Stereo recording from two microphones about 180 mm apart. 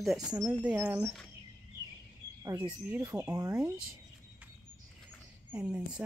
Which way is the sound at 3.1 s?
20° right (ahead or behind).